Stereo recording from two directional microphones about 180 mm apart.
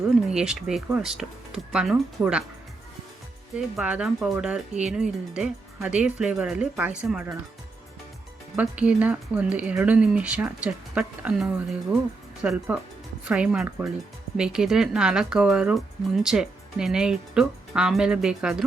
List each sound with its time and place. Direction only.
0.3 s speech: 5° right (ahead or behind)
3.8 s speech: 5° right (ahead or behind)
8.5 s speech: 5° right (ahead or behind)